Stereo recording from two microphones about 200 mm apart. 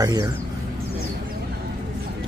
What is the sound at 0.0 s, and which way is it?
Speech, 20° right (ahead or behind).